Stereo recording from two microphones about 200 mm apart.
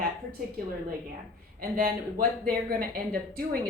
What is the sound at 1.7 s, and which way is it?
Speech, 45° right (ahead or behind).